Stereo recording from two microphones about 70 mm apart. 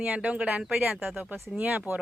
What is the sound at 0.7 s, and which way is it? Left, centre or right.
Speech, right.